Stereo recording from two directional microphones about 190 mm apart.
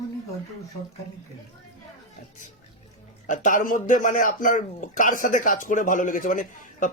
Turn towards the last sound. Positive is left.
turn(degrees=45)  # may be behind; listen again after turning